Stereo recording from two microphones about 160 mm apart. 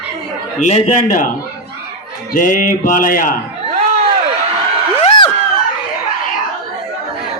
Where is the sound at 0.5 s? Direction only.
45° left (ahead or behind).